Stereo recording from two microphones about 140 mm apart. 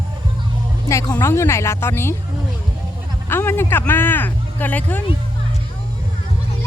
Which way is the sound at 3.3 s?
15° left (ahead or behind).